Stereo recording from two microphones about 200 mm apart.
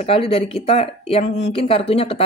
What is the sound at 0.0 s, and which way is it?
Speech, 30° left (ahead or behind).